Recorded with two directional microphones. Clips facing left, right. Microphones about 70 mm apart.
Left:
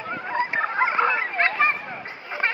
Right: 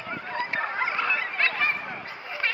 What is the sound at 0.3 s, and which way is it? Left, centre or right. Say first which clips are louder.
Fowl: left 5 dB; left.